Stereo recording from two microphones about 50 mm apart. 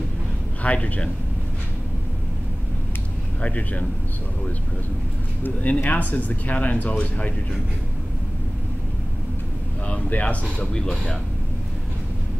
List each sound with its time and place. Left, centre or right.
0.6 s speech: left
3.4 s speech: left
5.4 s speech: left
9.8 s speech: left